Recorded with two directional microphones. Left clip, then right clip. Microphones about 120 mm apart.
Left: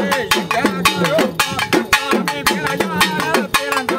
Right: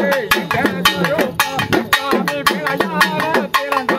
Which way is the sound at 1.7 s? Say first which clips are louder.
Left 2 dB; centre (ahead or behind).